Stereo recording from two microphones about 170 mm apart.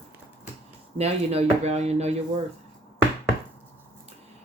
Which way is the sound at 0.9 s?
35° right (ahead or behind).